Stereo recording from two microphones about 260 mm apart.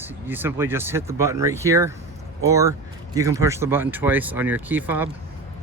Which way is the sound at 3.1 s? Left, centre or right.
Centre.